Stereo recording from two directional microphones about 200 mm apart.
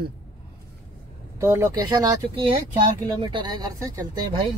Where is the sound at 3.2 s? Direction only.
20° right (ahead or behind).